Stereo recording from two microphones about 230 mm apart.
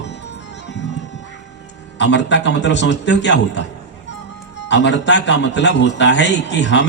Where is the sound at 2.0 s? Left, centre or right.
Left.